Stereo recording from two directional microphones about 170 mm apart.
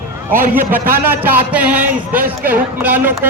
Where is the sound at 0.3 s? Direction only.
10° right (ahead or behind).